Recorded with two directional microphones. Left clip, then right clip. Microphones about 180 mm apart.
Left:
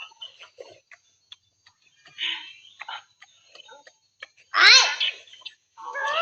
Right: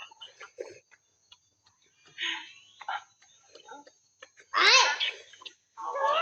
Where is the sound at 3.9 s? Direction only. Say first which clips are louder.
Left 8 dB; centre (ahead or behind).